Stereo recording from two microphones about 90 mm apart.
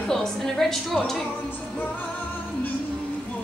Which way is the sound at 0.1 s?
5° left (ahead or behind).